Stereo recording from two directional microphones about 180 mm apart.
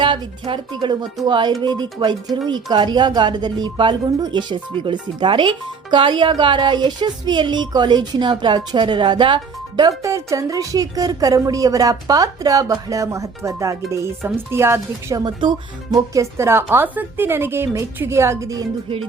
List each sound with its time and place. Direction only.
0.0 s speech: 25° right (ahead or behind)